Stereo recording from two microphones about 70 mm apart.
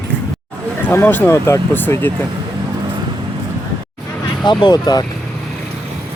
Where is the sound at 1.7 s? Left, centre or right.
Left.